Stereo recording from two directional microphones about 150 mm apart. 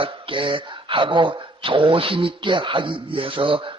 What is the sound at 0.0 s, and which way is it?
Speech, 35° right (ahead or behind).